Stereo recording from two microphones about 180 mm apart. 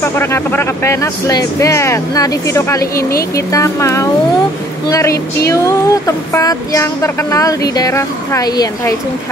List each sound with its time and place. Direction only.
0.0 s speech: 15° left (ahead or behind)